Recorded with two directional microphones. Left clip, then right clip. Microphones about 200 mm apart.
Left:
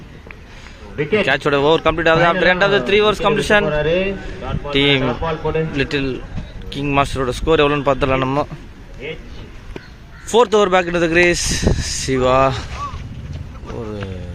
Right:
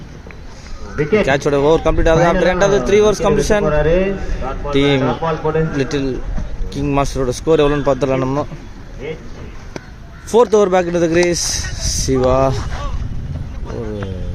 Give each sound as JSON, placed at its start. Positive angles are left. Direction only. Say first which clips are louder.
{"t": 0.9, "sound": "speech", "louder": "right 3 dB", "side_deg": -15}
{"t": 1.3, "sound": "speech", "louder": "even", "side_deg": 0}
{"t": 3.7, "sound": "speech", "louder": "right 3 dB", "side_deg": -15}
{"t": 4.7, "sound": "speech", "louder": "even", "side_deg": 0}
{"t": 5.0, "sound": "speech", "louder": "right 3 dB", "side_deg": -15}
{"t": 5.7, "sound": "speech", "louder": "right 1 dB", "side_deg": 0}
{"t": 9.0, "sound": "a sound", "louder": "right 2 dB", "side_deg": -15}
{"t": 10.3, "sound": "speech", "louder": "right 1 dB", "side_deg": 0}